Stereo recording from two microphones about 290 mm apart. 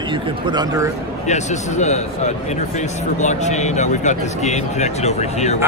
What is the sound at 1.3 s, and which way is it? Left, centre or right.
Speech, left.